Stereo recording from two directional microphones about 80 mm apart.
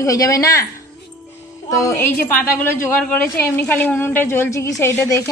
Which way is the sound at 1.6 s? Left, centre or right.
Left.